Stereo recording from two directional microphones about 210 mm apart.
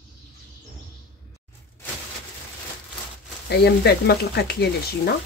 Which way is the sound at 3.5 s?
50° left (ahead or behind).